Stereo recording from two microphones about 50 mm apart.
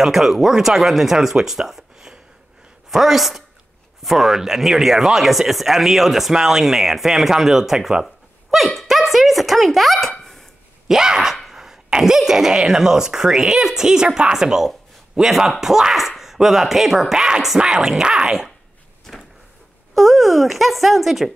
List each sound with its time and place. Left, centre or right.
0.0 s a woman's voice: centre
10.9 s speech: centre
19.1 s vehicle: centre
19.9 s speech: centre